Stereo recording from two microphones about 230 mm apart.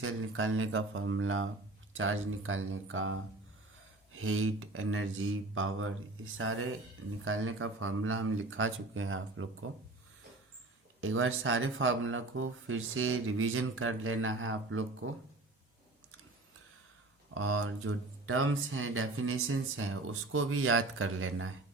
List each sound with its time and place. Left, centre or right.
0.0 s speech: right
11.0 s speech: right
17.3 s speech: right